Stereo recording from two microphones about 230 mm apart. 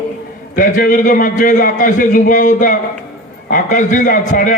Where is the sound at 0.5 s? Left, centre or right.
Left.